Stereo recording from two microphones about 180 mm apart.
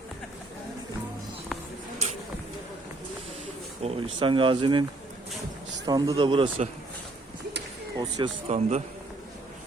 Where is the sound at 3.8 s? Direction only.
30° right (ahead or behind).